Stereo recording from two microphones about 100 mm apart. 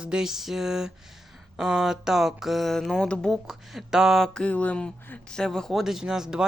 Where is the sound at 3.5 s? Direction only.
5° right (ahead or behind).